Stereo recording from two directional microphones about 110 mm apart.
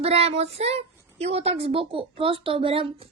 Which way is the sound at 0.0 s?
65° right (ahead or behind).